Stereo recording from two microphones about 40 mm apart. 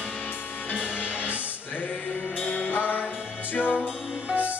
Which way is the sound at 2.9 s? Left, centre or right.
Left.